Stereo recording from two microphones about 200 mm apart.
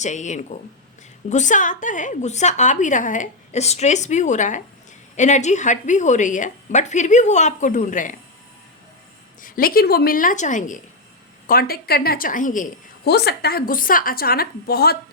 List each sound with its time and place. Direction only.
0.0 s a woman's voice: 35° left (ahead or behind)
9.4 s a woman's voice: 45° left (ahead or behind)
13.1 s a woman's voice: 55° left (ahead or behind)